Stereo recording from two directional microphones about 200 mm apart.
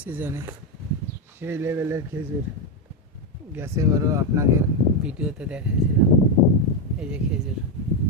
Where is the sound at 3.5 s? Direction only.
15° right (ahead or behind).